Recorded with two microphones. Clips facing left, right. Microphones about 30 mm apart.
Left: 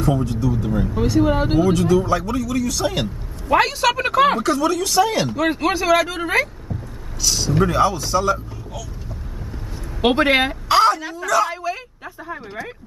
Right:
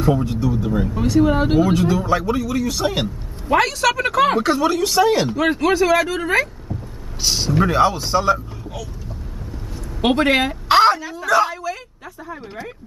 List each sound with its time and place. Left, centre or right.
0.2 s a man's voice: centre
0.7 s a man's voice: centre
3.5 s speech: centre
4.4 s a man's voice: right
5.5 s speech: centre
7.2 s speech: right
7.5 s a man's voice: centre
10.0 s speech: centre
10.7 s a sound: right
11.2 s speech: right
11.5 s speech: left